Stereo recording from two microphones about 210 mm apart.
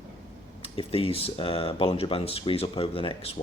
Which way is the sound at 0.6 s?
25° left (ahead or behind).